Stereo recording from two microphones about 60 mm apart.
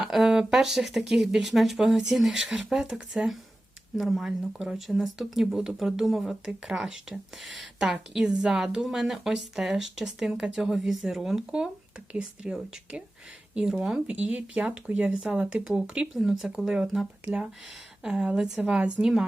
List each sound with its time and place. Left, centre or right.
0.0 s speech: centre
13.7 s a woman's voice: centre
19.0 s speech: right